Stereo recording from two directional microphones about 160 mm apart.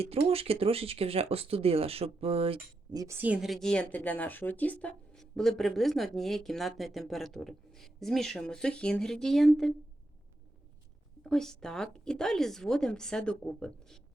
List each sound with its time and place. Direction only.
0.0 s speech: 40° right (ahead or behind)
2.9 s speech: 20° right (ahead or behind)
3.2 s a woman's voice: 10° right (ahead or behind)
11.2 s a woman's voice: 5° left (ahead or behind)